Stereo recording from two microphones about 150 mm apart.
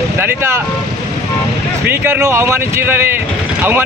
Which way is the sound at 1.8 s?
15° right (ahead or behind).